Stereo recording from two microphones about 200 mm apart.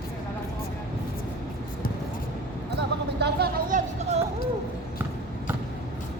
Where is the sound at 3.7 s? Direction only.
40° right (ahead or behind).